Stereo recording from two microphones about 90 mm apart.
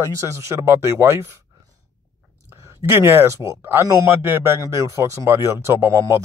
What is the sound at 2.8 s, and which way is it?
Speech, 30° right (ahead or behind).